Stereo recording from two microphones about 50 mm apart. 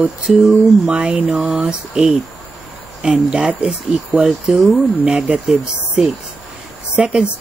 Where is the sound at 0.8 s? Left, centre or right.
Centre.